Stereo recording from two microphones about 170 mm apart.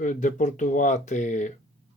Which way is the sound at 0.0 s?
50° left (ahead or behind).